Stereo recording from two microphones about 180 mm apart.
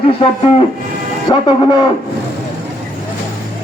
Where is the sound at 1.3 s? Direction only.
25° left (ahead or behind).